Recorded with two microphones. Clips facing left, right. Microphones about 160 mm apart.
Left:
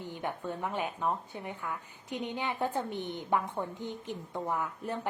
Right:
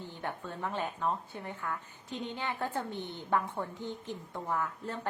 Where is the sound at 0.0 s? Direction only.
15° left (ahead or behind).